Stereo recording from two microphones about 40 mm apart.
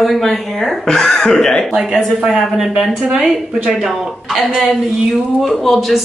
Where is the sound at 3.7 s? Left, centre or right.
Centre.